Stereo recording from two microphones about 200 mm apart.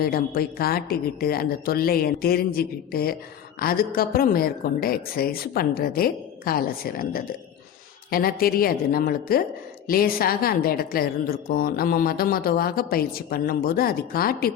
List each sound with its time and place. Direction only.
0.0 s a woman's voice: 50° left (ahead or behind)